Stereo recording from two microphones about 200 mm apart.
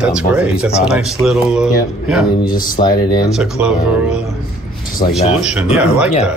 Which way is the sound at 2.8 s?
30° left (ahead or behind).